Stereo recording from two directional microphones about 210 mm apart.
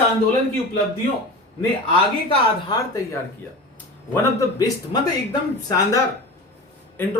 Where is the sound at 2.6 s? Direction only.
15° left (ahead or behind).